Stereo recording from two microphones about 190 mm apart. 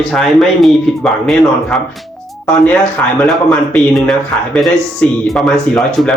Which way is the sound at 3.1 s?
Centre (ahead or behind).